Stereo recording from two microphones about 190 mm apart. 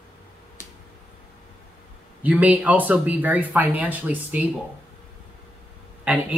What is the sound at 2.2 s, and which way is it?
Speech, 10° right (ahead or behind).